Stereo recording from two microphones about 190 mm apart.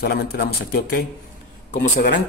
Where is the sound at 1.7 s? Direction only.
55° left (ahead or behind).